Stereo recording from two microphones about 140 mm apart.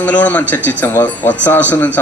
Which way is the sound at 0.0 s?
10° left (ahead or behind).